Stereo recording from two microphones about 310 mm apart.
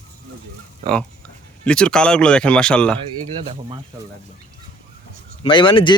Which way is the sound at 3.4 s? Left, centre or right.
Centre.